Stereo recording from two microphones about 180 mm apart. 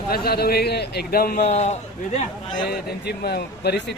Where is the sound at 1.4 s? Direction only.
40° left (ahead or behind).